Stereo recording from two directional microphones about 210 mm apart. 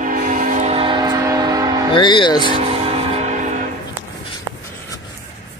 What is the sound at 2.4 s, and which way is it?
Music, 30° right (ahead or behind).